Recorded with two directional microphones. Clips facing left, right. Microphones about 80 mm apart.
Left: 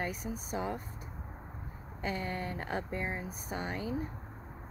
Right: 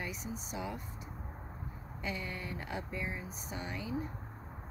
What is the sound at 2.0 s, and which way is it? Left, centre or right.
Speech, left.